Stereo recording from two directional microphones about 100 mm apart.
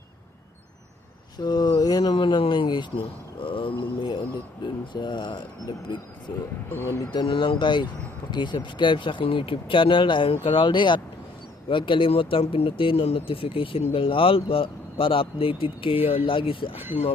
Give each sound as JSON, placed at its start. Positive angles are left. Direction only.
{"t": 1.4, "sound": "speech", "side_deg": 45}
{"t": 2.1, "sound": "speech", "side_deg": 55}
{"t": 6.7, "sound": "speech", "side_deg": 20}
{"t": 7.1, "sound": "speech", "side_deg": 55}